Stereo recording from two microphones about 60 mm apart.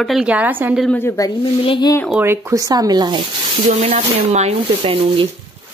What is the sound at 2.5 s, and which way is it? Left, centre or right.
Speech, right.